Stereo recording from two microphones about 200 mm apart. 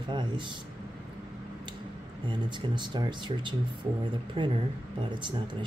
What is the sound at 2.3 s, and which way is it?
Speech, 20° right (ahead or behind).